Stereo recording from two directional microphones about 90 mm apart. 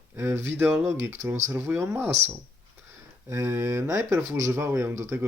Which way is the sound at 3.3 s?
30° right (ahead or behind).